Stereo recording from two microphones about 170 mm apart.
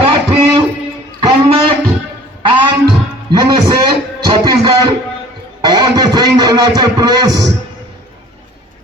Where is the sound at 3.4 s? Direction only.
25° right (ahead or behind).